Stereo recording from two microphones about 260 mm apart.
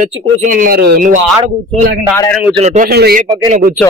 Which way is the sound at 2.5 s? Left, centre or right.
Right.